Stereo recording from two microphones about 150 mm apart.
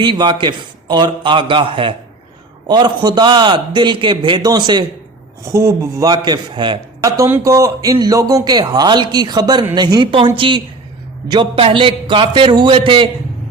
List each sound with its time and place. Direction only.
0.0 s a man's voice: 30° right (ahead or behind)